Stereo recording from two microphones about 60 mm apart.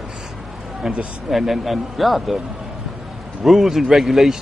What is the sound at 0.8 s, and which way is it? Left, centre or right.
Speech, centre.